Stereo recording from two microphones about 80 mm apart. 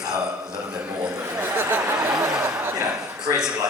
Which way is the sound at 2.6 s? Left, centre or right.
Right.